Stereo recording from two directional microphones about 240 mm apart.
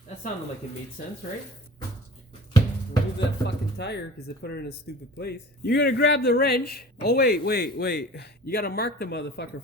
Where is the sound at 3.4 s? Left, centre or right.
Left.